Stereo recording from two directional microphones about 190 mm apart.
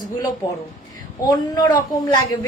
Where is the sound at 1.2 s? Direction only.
20° left (ahead or behind).